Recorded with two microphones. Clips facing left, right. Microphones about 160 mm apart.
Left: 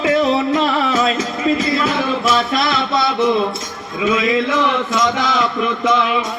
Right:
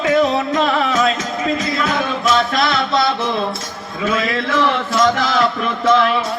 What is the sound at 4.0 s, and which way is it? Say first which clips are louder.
Music: left 3 dB; 15° left (ahead or behind).